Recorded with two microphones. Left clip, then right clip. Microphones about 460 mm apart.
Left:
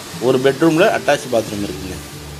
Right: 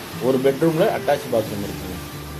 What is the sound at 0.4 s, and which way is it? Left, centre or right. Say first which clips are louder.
Speech: left 5 dB; right.